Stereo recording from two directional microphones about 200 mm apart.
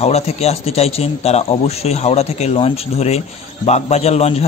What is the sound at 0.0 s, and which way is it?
A man's voice, 30° left (ahead or behind).